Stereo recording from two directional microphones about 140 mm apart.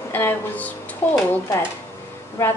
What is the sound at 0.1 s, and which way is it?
A woman's voice, 15° left (ahead or behind).